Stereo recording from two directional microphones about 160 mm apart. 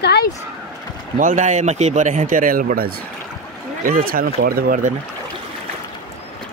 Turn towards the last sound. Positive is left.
turn(degrees=-55)  # may be behind; listen again after turning